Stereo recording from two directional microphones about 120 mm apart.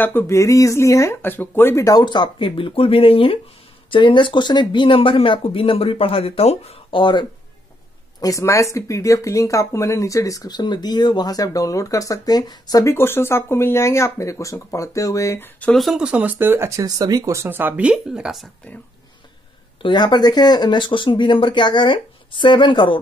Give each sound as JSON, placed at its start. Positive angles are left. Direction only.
{"t": 0.0, "sound": "speech", "side_deg": 15}
{"t": 8.2, "sound": "speech", "side_deg": 30}
{"t": 12.9, "sound": "speech", "side_deg": 20}
{"t": 15.7, "sound": "speech", "side_deg": 0}
{"t": 19.8, "sound": "speech", "side_deg": 40}